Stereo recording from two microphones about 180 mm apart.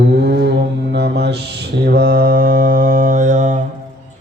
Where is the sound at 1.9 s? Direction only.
60° right (ahead or behind).